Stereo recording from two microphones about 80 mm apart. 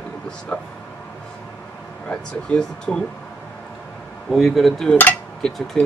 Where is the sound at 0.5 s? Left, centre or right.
Centre.